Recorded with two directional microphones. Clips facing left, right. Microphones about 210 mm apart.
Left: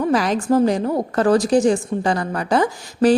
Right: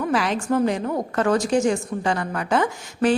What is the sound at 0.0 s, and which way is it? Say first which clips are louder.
A woman's voice: left 4 dB; 40° left (ahead or behind).